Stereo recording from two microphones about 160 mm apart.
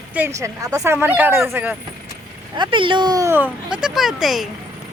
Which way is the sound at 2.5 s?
30° right (ahead or behind).